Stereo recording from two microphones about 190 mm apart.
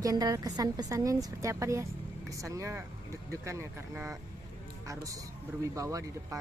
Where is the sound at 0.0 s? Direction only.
20° right (ahead or behind).